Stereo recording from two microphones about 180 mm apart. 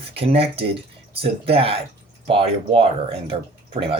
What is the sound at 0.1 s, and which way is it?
Speech, 30° right (ahead or behind).